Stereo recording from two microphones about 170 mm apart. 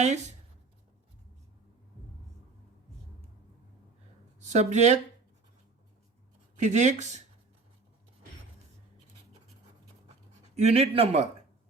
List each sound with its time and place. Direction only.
4.4 s speech: 45° right (ahead or behind)
6.6 s speech: 45° right (ahead or behind)
10.5 s speech: 40° right (ahead or behind)